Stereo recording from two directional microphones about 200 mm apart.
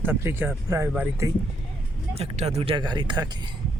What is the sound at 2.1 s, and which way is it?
Speech, 30° right (ahead or behind).